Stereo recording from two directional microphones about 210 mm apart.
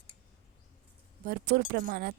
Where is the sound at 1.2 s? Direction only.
50° right (ahead or behind).